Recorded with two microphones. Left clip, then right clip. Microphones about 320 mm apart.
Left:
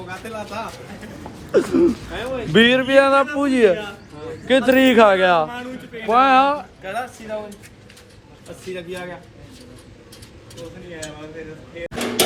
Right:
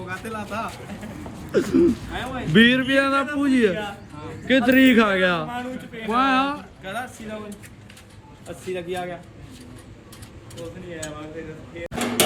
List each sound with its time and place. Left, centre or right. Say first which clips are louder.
0.1 s speech: even; centre
5.5 s a sound: even; right
6.1 s speech: left 7 dB; centre
8.7 s a man's voice: right 2 dB; centre